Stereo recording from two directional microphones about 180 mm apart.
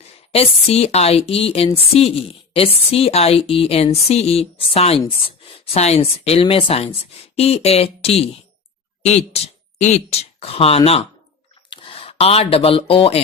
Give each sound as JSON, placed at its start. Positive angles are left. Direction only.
{"t": 0.0, "sound": "speech", "side_deg": 35}